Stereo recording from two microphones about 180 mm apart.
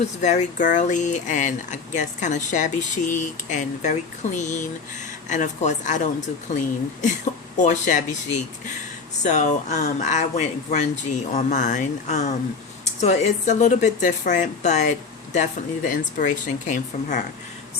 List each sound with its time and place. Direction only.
0.2 s speech: 40° left (ahead or behind)
7.5 s speech: 45° left (ahead or behind)